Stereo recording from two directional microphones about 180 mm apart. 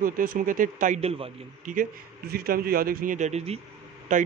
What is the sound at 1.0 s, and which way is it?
Speech, 35° right (ahead or behind).